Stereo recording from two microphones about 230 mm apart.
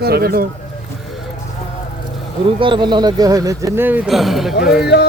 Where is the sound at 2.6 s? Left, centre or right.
Centre.